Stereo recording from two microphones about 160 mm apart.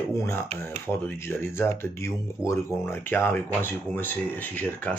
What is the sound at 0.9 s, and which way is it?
Speech, 15° left (ahead or behind).